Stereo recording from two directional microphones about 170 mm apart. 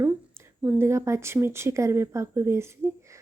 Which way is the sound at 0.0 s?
15° right (ahead or behind).